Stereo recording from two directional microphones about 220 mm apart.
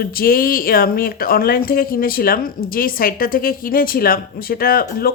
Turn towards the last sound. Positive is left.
turn(degrees=45)  # may be behind; listen again after turning